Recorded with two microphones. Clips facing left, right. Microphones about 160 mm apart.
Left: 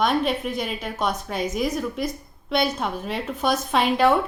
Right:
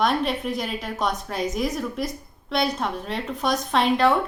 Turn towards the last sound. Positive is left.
turn(degrees=5)  # may be behind; listen again after turning